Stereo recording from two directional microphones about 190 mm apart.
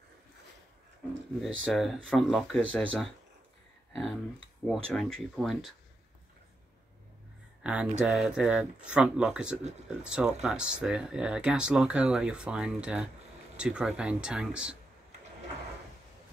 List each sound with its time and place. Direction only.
1.6 s speech: centre (ahead or behind)
3.9 s speech: centre (ahead or behind)
7.6 s speech: 5° right (ahead or behind)